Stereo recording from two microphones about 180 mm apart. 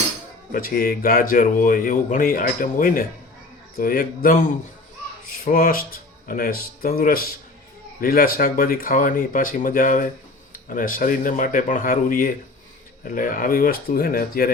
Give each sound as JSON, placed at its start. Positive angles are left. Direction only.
{"t": 0.5, "sound": "speech", "side_deg": 50}
{"t": 5.5, "sound": "speech", "side_deg": 50}